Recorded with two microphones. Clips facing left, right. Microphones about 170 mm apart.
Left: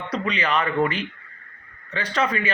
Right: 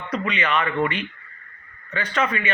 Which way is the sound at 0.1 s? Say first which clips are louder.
Even; 35° left (ahead or behind).